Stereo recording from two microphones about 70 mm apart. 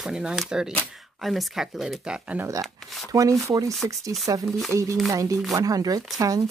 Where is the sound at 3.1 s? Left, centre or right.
Right.